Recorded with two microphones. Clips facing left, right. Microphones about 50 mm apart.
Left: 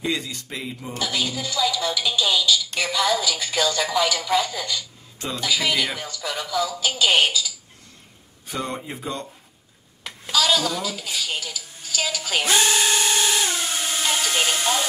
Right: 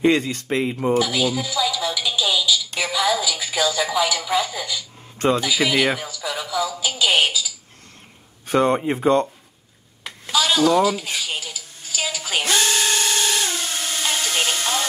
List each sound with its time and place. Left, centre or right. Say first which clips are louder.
0.0 s speech: right 9 dB; right
0.9 s speech: right 3 dB; centre
8.5 s speech: right 11 dB; right
10.0 s a sound: right 1 dB; centre
10.8 s speech: right 8 dB; centre
12.4 s a sound: left 1 dB; centre